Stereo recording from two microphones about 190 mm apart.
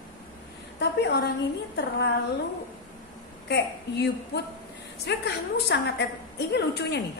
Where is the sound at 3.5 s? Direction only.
60° left (ahead or behind).